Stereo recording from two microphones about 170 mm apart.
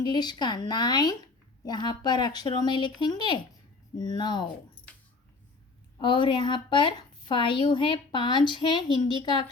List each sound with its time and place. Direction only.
0.0 s a woman's voice: 25° left (ahead or behind)
6.0 s a woman's voice: 30° left (ahead or behind)